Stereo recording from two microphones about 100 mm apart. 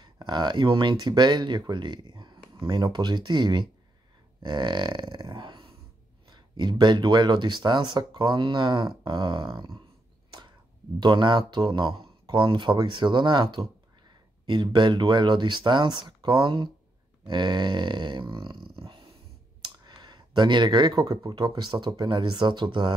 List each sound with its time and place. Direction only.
0.0 s speech: 45° right (ahead or behind)
4.4 s grunt: 50° right (ahead or behind)
6.3 s speech: 50° right (ahead or behind)
11.0 s speech: 50° right (ahead or behind)
18.8 s dog: 60° right (ahead or behind)
19.6 s a sound: 45° right (ahead or behind)
21.4 s speech: 50° right (ahead or behind)